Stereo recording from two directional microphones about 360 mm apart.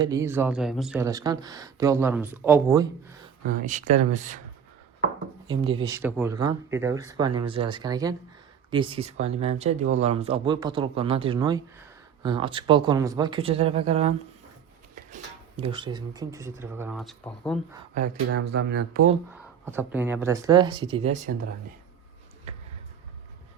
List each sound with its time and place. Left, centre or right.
0.0 s speech: centre
3.6 s speech: right
5.5 s speech: centre
15.1 s speech: centre
17.9 s speech: right
19.6 s speech: centre